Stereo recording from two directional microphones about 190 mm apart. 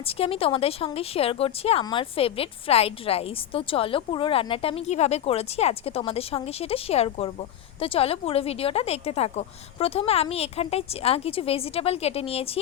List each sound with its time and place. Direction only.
0.1 s speech: 30° left (ahead or behind)